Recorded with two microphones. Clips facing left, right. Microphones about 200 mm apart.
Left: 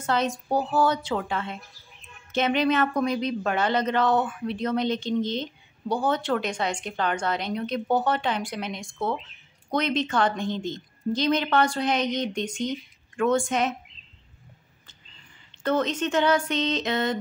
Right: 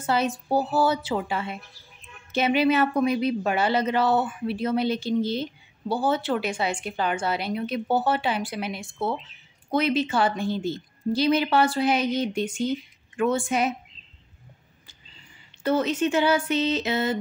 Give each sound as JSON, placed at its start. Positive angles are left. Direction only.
{"t": 0.0, "sound": "speech", "side_deg": -5}
{"t": 15.6, "sound": "speech", "side_deg": -10}